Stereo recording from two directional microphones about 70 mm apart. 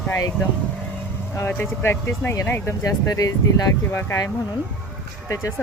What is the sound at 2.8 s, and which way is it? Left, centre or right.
Speech, left.